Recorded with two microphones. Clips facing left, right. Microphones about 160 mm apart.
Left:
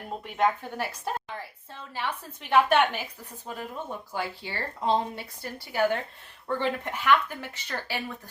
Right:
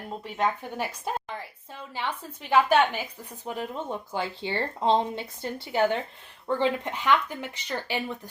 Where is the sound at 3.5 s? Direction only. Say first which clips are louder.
Right 4 dB; 20° right (ahead or behind).